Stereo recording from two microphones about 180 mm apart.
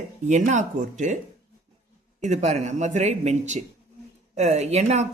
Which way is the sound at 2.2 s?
40° right (ahead or behind).